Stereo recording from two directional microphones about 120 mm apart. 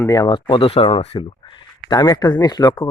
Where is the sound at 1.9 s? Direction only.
35° left (ahead or behind).